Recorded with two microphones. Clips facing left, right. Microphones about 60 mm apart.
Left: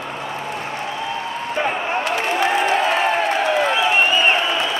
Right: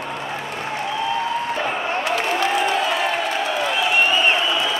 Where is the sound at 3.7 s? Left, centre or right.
Left.